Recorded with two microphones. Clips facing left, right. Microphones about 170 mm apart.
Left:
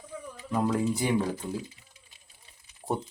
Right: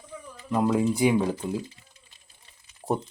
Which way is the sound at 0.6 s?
10° right (ahead or behind).